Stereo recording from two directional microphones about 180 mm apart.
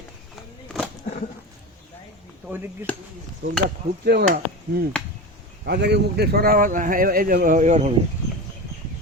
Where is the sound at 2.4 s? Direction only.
10° right (ahead or behind).